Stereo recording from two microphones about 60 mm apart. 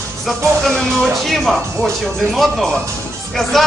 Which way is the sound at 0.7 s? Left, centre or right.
Centre.